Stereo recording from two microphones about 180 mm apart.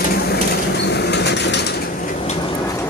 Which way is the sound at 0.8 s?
70° left (ahead or behind).